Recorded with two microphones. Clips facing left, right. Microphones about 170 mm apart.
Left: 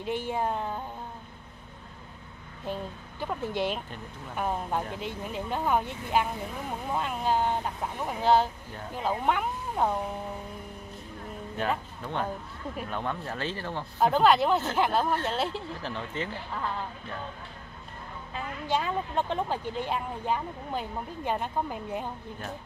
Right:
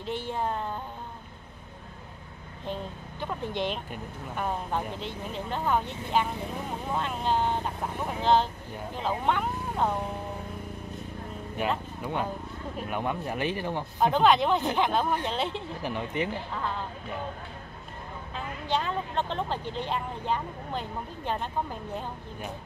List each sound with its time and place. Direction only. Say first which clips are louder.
0.0 s speech: left 1 dB; 10° left (ahead or behind)
2.6 s speech: even; 10° left (ahead or behind)
11.6 s speech: right 1 dB; 10° right (ahead or behind)
13.9 s speech: even; centre (ahead or behind)
15.8 s speech: right 7 dB; 15° right (ahead or behind)
18.3 s speech: even; 10° left (ahead or behind)